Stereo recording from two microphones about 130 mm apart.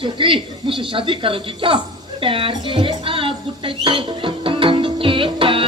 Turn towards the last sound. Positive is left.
turn(degrees=-40)  # may be behind; listen again after turning